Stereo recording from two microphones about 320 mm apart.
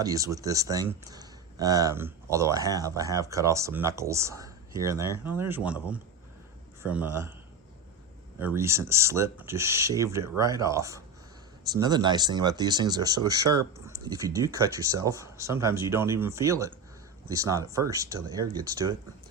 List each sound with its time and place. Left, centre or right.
0.0 s speech: centre
8.4 s speech: centre